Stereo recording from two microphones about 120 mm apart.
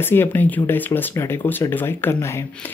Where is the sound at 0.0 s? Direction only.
20° left (ahead or behind).